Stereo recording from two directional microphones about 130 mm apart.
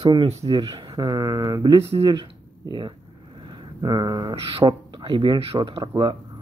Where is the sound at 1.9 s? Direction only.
40° right (ahead or behind).